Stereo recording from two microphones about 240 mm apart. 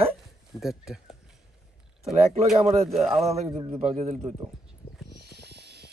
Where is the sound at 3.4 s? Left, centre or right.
Centre.